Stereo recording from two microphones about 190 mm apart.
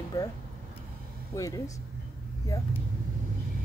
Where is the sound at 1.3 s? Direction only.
15° left (ahead or behind).